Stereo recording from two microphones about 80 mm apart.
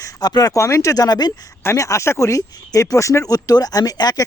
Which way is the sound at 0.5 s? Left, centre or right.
Left.